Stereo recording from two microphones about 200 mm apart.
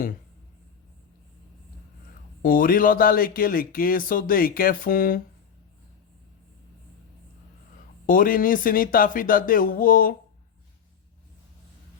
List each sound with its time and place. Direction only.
2.4 s speech: 45° left (ahead or behind)
8.0 s speech: 45° left (ahead or behind)